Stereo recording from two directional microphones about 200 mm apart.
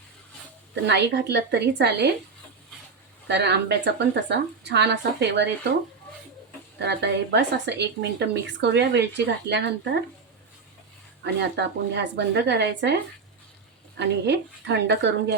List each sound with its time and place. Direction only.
0.9 s speech: 60° right (ahead or behind)
3.2 s speech: 60° right (ahead or behind)
6.7 s speech: 60° right (ahead or behind)
11.2 s speech: 60° right (ahead or behind)